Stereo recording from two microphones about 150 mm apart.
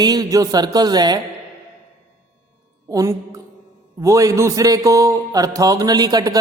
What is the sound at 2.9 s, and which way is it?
Speech, 20° right (ahead or behind).